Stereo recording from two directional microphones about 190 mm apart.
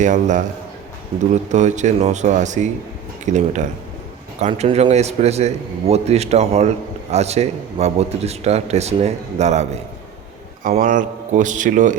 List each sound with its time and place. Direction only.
0.0 s a man's voice: 40° right (ahead or behind)
1.1 s a man's voice: 30° right (ahead or behind)